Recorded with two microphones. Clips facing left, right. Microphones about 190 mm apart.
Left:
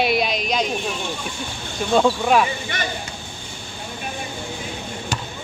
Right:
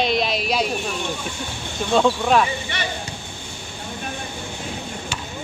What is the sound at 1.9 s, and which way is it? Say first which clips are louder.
Speech: left 1 dB; 5° left (ahead or behind).